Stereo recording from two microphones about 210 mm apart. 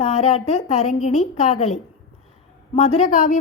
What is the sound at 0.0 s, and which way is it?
A woman's voice, 30° left (ahead or behind).